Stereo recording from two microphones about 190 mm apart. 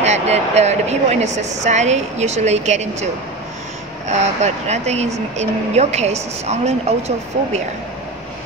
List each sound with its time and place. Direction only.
0.0 s a woman's voice: 35° right (ahead or behind)
4.1 s a woman's voice: 35° right (ahead or behind)